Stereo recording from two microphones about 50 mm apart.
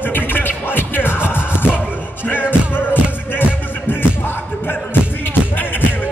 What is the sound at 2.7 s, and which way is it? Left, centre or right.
Music, left.